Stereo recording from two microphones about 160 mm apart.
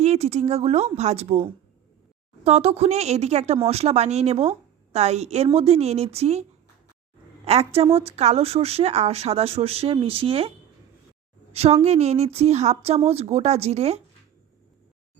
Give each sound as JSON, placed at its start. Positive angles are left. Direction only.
{"t": 0.0, "sound": "a woman's voice", "side_deg": -40}
{"t": 7.4, "sound": "speech", "side_deg": -40}
{"t": 11.5, "sound": "a woman's voice", "side_deg": -40}